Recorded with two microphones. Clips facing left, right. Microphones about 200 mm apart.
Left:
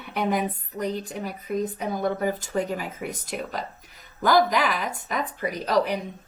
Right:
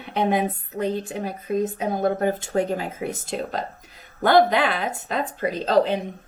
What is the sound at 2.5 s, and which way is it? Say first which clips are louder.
Speech: right 4 dB; 65° right (ahead or behind).